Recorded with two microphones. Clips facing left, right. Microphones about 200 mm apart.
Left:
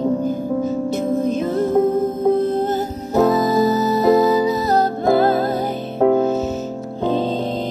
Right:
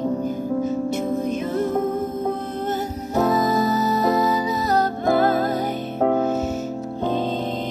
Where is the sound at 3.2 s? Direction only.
30° left (ahead or behind).